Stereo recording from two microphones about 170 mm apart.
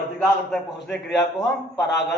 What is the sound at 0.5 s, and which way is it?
A man's voice, centre (ahead or behind).